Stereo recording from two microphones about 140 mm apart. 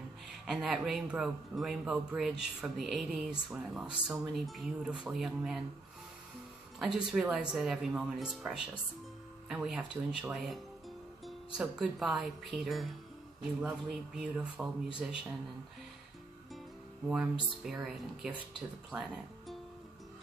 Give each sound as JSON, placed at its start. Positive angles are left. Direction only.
{"t": 0.5, "sound": "speech", "side_deg": 0}
{"t": 6.8, "sound": "speech", "side_deg": -5}
{"t": 17.1, "sound": "speech", "side_deg": -5}